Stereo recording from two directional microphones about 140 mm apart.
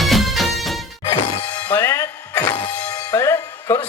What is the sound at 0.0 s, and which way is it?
Music, centre (ahead or behind).